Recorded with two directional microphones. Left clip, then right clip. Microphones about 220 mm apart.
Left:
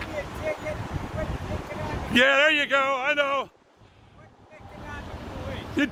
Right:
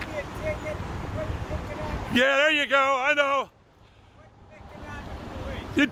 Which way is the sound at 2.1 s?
5° left (ahead or behind).